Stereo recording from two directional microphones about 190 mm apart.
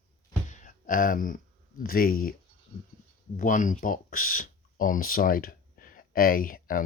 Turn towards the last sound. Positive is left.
turn(degrees=50)  # may be behind; listen again after turning